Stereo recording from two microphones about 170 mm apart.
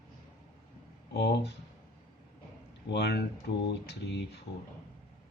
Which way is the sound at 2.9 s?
75° left (ahead or behind).